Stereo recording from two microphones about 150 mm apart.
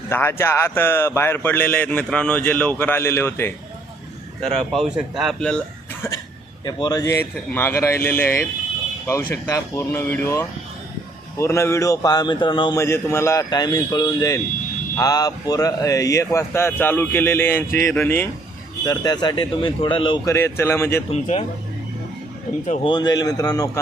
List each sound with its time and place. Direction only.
0.1 s speech: 15° left (ahead or behind)
4.4 s speech: centre (ahead or behind)
6.7 s speech: 25° left (ahead or behind)
12.7 s speech: 20° left (ahead or behind)
18.9 s speech: 30° left (ahead or behind)
20.2 s speech: 20° left (ahead or behind)
21.1 s speech: 45° left (ahead or behind)
22.6 s speech: 50° left (ahead or behind)
22.9 s speech: 30° left (ahead or behind)